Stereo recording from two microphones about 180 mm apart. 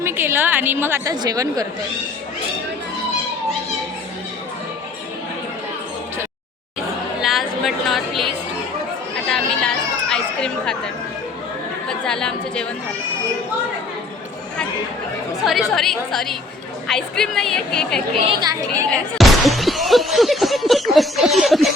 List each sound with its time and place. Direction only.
0.0 s a woman's voice: 10° right (ahead or behind)
7.2 s a sound: centre (ahead or behind)
9.2 s chatter: 5° left (ahead or behind)
12.0 s a woman's voice: 5° left (ahead or behind)
15.7 s a woman's voice: centre (ahead or behind)
18.2 s speech: 25° right (ahead or behind)
18.9 s speech: centre (ahead or behind)